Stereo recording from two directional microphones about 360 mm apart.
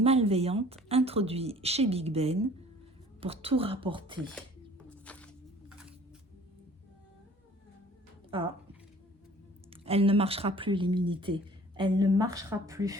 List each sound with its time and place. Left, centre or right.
0.0 s a woman's voice: centre
4.9 s a sound: centre
8.3 s a woman's voice: centre
9.6 s a woman's voice: centre